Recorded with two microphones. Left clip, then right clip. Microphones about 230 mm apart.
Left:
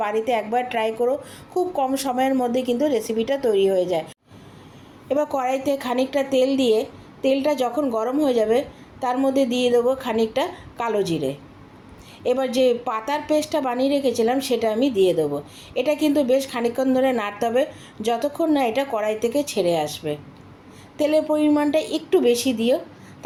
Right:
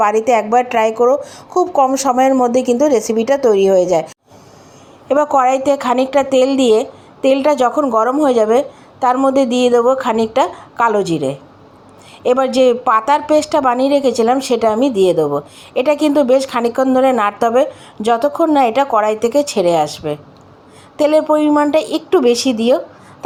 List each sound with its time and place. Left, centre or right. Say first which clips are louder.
0.0 s a woman's voice: right 10 dB; right
5.0 s a woman's voice: right 10 dB; right
12.2 s a woman's voice: right 8 dB; right